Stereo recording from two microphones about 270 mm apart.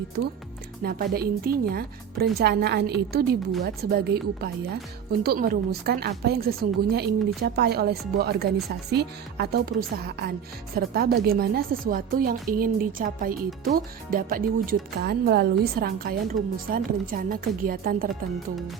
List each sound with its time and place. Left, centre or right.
0.8 s a woman's voice: right
18.1 s speech: centre